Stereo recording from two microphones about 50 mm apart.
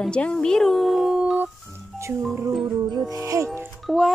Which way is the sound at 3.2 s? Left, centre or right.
Right.